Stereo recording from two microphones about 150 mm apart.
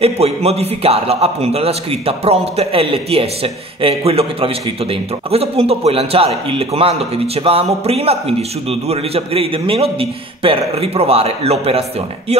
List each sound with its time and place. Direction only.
0.0 s a man's voice: 45° right (ahead or behind)